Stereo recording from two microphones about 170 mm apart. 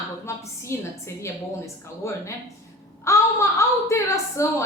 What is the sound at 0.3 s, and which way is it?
A woman's voice, 15° left (ahead or behind).